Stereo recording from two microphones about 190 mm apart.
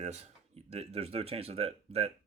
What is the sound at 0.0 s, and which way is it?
Speech, 35° right (ahead or behind).